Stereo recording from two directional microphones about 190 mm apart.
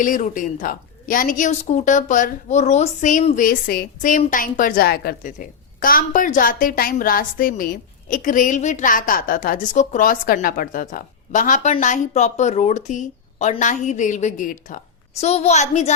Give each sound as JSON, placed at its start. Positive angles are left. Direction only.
{"t": 0.0, "sound": "a woman's voice", "side_deg": 45}